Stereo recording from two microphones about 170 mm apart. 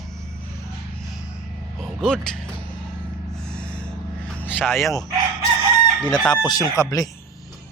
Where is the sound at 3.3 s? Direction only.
5° left (ahead or behind).